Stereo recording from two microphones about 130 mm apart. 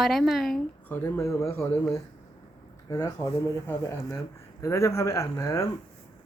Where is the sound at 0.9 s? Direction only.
15° left (ahead or behind).